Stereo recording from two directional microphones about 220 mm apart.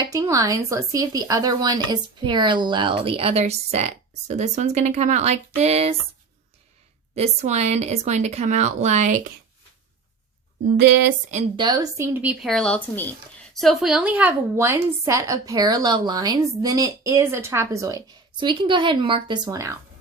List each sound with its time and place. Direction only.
0.0 s speech: 15° right (ahead or behind)
7.2 s speech: 30° right (ahead or behind)
11.1 s speech: 30° right (ahead or behind)
11.6 s a woman's voice: 20° right (ahead or behind)